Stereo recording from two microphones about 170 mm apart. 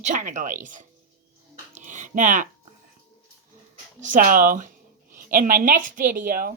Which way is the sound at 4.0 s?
50° right (ahead or behind).